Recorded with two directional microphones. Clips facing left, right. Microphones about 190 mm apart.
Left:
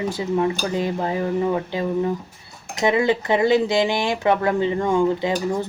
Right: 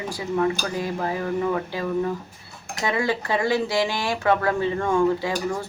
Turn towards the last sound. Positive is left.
turn(degrees=20)  # may be behind; listen again after turning